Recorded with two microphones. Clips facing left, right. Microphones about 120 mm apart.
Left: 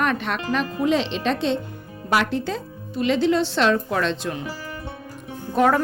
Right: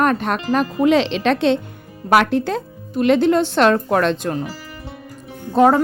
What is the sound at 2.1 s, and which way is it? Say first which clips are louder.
Speech: right 6 dB; 60° right (ahead or behind).